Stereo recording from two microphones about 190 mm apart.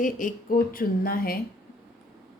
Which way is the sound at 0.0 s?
45° left (ahead or behind).